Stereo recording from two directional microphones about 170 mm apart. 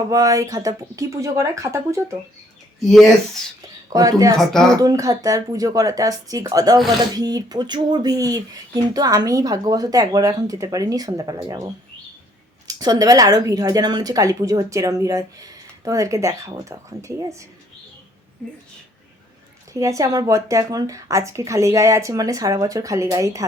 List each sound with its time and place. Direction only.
0.1 s speech: 20° right (ahead or behind)
2.8 s speech: centre (ahead or behind)
3.8 s speech: 20° right (ahead or behind)
6.7 s speech: centre (ahead or behind)
7.2 s speech: 20° right (ahead or behind)
19.7 s speech: 20° right (ahead or behind)